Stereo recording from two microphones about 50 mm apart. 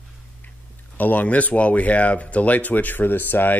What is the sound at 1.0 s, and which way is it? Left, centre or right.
Speech, left.